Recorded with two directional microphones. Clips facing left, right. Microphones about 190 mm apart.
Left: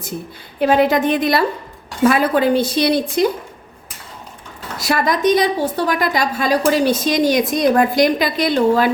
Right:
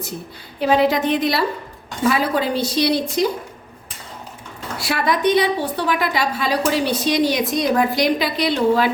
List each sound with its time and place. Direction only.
0.9 s a woman's voice: 50° left (ahead or behind)
4.8 s a woman's voice: 45° left (ahead or behind)